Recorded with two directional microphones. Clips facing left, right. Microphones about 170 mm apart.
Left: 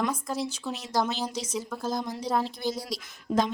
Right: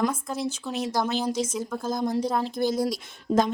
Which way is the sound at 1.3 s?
50° right (ahead or behind).